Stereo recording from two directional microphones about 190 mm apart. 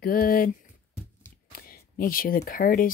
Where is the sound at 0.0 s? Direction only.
50° left (ahead or behind).